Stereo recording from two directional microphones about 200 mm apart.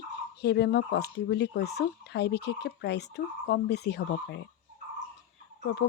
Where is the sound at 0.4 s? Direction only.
55° left (ahead or behind).